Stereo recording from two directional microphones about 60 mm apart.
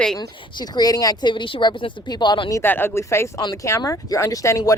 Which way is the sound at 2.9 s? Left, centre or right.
Left.